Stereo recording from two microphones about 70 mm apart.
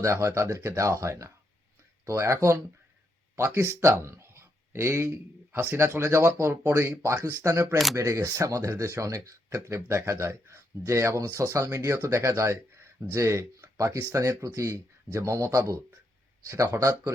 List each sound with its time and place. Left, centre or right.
0.0 s speech: right